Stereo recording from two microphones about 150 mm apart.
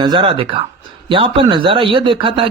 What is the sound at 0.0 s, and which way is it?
A man's voice, 30° right (ahead or behind).